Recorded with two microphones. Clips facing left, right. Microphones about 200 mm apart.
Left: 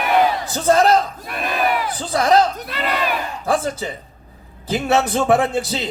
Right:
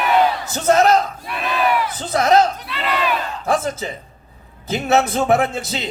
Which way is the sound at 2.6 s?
45° left (ahead or behind).